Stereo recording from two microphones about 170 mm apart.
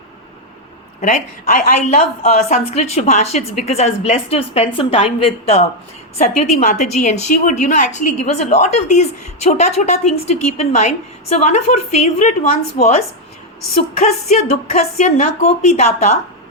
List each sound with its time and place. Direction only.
1.0 s a woman's voice: 50° left (ahead or behind)
6.6 s a woman's voice: 45° left (ahead or behind)
14.0 s a woman's voice: 40° left (ahead or behind)